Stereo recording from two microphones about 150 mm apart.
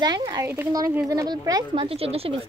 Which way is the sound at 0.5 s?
20° right (ahead or behind).